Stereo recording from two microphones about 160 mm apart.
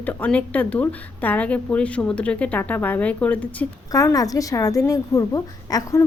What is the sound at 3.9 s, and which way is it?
A woman's voice, 20° left (ahead or behind).